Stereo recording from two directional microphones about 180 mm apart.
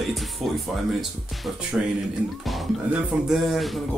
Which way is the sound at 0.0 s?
Centre (ahead or behind).